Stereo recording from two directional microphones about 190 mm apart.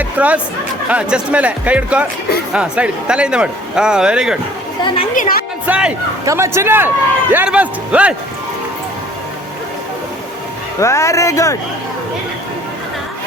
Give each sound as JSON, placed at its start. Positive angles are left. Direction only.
{"t": 0.0, "sound": "a sound", "side_deg": -5}
{"t": 0.9, "sound": "a man's voice", "side_deg": -5}
{"t": 5.1, "sound": "a woman's voice", "side_deg": 45}
{"t": 5.6, "sound": "a man's voice", "side_deg": -5}
{"t": 10.8, "sound": "speech", "side_deg": 15}